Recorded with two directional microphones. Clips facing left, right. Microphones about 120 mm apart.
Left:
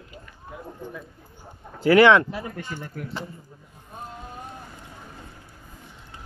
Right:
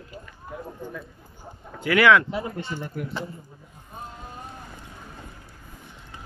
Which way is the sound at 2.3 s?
25° right (ahead or behind).